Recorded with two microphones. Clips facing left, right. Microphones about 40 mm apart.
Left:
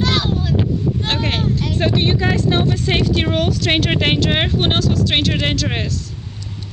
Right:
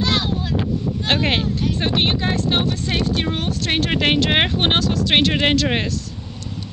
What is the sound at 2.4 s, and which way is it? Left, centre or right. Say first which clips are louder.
Vehicle: left 3 dB; right.